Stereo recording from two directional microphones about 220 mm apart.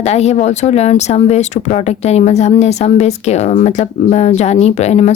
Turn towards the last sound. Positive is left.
turn(degrees=30)  # may be behind; listen again after turning